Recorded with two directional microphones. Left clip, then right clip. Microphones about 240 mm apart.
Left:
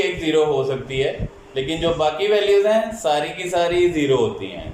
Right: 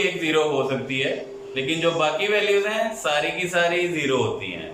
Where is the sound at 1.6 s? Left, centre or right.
Left.